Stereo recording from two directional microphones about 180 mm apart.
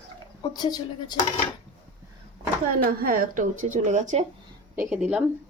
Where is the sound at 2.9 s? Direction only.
50° right (ahead or behind).